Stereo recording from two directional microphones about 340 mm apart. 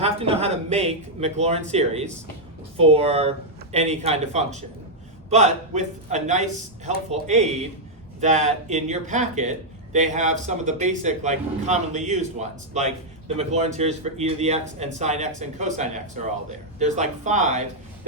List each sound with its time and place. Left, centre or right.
0.0 s speech: centre